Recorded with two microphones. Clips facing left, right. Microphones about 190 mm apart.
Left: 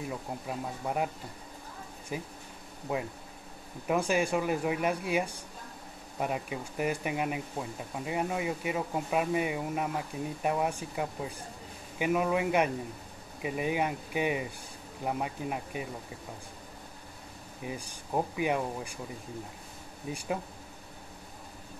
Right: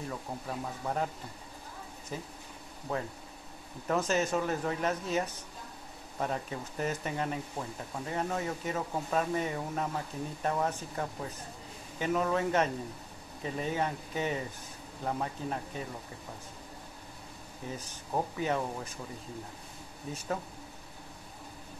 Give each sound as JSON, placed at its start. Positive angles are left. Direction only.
{"t": 0.0, "sound": "speech", "side_deg": 10}
{"t": 17.6, "sound": "speech", "side_deg": 10}
{"t": 20.1, "sound": "speech", "side_deg": 10}